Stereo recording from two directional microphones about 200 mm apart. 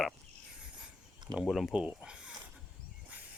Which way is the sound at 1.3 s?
Centre (ahead or behind).